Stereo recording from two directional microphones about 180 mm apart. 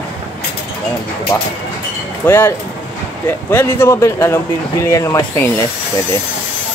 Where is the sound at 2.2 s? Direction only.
15° left (ahead or behind).